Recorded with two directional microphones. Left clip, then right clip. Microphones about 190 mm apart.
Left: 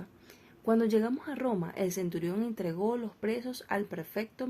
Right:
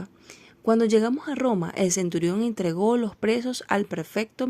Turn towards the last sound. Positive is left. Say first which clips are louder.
# right 8 dB
turn(degrees=-40)  # may be behind; listen again after turning